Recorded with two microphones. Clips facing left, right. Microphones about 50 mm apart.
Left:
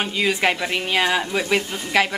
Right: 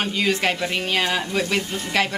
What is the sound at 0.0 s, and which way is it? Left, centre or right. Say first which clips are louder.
Speech: left 1 dB; centre.